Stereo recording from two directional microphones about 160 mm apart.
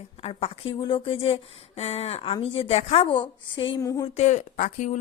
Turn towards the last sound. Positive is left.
turn(degrees=50)  # may be behind; listen again after turning